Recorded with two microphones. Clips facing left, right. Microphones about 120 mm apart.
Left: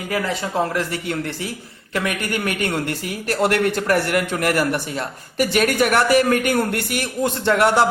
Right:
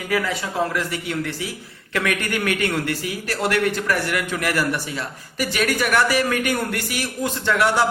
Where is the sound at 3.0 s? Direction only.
50° left (ahead or behind).